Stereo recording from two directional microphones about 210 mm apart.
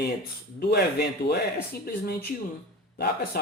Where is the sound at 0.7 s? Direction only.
50° left (ahead or behind).